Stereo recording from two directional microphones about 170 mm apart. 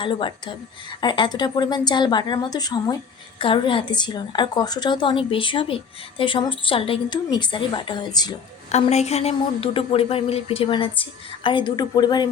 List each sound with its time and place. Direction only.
0.0 s a woman's voice: 30° left (ahead or behind)
8.7 s speech: 40° left (ahead or behind); by 12.3 s 25° left (ahead or behind)